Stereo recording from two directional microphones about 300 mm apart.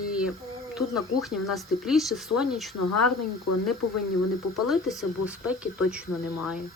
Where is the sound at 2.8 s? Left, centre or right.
Left.